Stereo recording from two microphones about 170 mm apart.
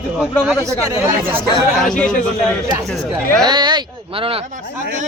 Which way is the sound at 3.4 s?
25° right (ahead or behind).